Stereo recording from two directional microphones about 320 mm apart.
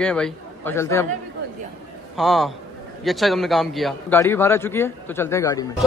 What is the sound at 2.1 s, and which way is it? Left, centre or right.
A man's voice, centre.